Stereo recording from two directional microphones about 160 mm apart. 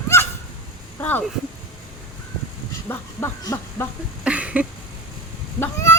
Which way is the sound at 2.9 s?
15° left (ahead or behind).